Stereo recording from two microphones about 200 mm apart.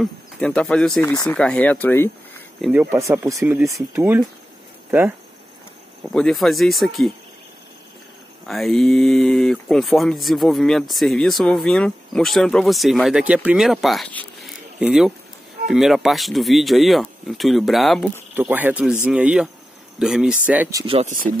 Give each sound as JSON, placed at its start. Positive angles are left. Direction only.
{"t": 0.0, "sound": "speech", "side_deg": 5}
{"t": 2.6, "sound": "speech", "side_deg": -10}
{"t": 6.0, "sound": "speech", "side_deg": 0}
{"t": 8.5, "sound": "speech", "side_deg": 0}
{"t": 20.8, "sound": "speech", "side_deg": -30}